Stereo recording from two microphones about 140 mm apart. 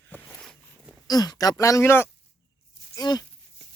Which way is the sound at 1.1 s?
25° left (ahead or behind).